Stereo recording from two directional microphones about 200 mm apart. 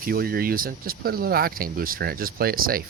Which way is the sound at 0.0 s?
45° right (ahead or behind).